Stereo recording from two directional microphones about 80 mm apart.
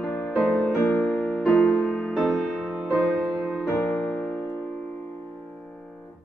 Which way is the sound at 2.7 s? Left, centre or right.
Centre.